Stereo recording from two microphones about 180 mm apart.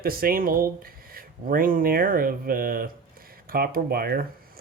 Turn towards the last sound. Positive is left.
turn(degrees=-55)  # may be behind; listen again after turning